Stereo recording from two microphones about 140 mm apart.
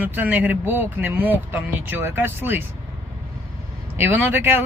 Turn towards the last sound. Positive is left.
turn(degrees=-15)  # may be behind; listen again after turning